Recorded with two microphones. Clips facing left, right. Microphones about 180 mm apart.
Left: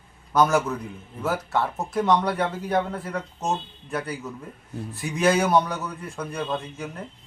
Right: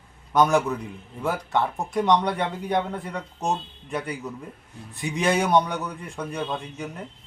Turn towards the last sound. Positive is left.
turn(degrees=0)  # may be behind; listen again after turning